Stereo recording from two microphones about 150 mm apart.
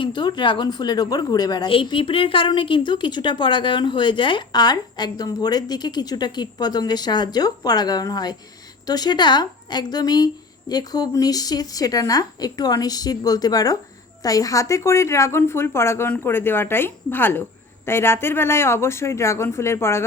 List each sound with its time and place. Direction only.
0.0 s a woman's voice: 30° left (ahead or behind)